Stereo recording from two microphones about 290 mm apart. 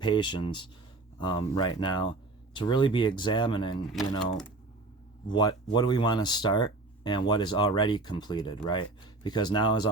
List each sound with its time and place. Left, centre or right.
0.0 s speech: centre
5.3 s speech: centre